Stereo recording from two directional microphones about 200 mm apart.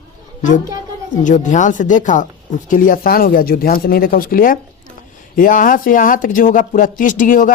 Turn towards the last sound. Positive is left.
turn(degrees=40)  # may be behind; listen again after turning